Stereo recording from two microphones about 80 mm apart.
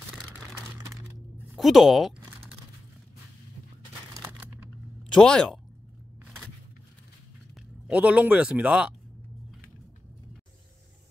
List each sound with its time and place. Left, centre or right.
1.6 s speech: centre
4.2 s crumpling: right
5.0 s speech: centre
7.9 s speech: centre